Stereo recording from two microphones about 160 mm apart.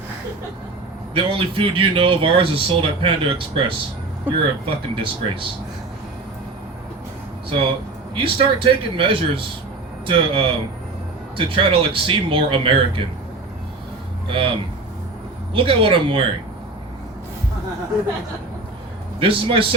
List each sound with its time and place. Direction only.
1.1 s speech: 30° right (ahead or behind)
8.1 s speech: 35° right (ahead or behind)
14.3 s speech: 35° right (ahead or behind)
15.5 s speech: 35° right (ahead or behind)
19.2 s speech: 35° right (ahead or behind)